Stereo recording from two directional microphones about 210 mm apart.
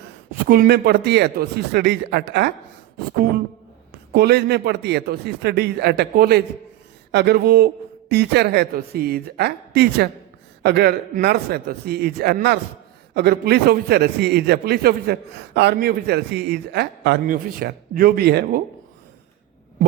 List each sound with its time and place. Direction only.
0.4 s a man's voice: 45° right (ahead or behind)
4.1 s a man's voice: 50° right (ahead or behind)